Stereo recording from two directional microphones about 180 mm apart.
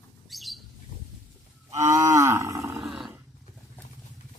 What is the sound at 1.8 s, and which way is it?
Cattle, 15° right (ahead or behind).